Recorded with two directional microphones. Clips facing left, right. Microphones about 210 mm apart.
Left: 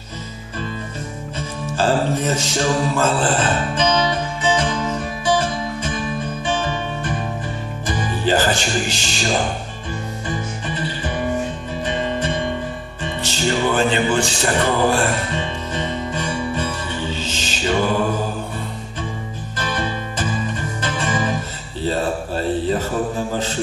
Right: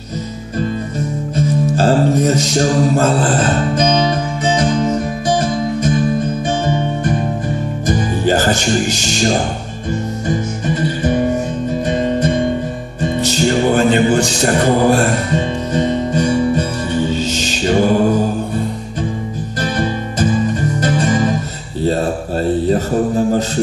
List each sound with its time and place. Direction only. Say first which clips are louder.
1.8 s music: right 4 dB; 40° right (ahead or behind)
7.8 s music: right 5 dB; 40° right (ahead or behind)
19.6 s music: right 6 dB; 40° right (ahead or behind)
21.8 s mantra: right 4 dB; 45° right (ahead or behind)